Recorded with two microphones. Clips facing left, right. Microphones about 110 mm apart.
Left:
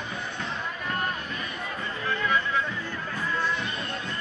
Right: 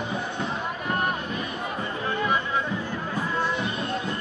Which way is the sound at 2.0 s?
25° right (ahead or behind).